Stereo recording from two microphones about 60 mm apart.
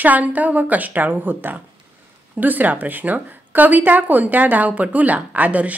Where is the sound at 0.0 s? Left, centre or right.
Right.